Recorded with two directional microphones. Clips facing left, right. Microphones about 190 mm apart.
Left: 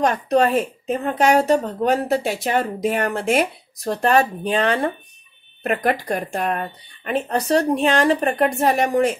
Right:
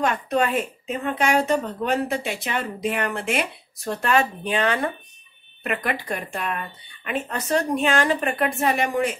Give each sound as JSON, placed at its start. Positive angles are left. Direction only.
{"t": 0.0, "sound": "a woman's voice", "side_deg": 35}
{"t": 5.6, "sound": "a woman's voice", "side_deg": 45}